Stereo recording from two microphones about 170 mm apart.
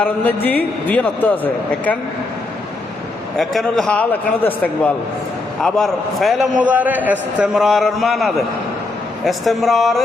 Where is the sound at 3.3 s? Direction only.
Centre (ahead or behind).